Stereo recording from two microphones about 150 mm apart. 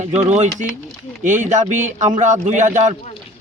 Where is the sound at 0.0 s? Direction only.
50° right (ahead or behind).